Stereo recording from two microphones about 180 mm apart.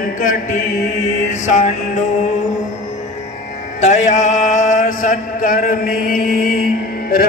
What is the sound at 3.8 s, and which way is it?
Mantra, 40° left (ahead or behind).